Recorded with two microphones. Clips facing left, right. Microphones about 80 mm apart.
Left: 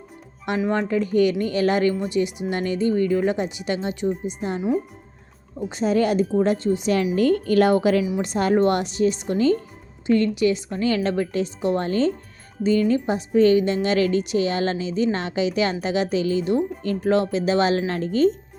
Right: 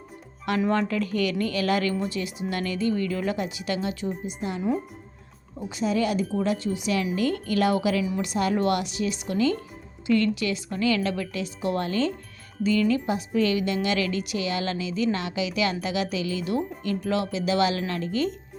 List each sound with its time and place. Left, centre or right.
0.7 s speech: centre
4.4 s a woman's voice: left
5.6 s a woman's voice: left